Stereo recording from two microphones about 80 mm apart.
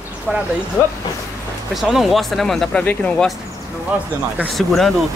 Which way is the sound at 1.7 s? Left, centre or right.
Centre.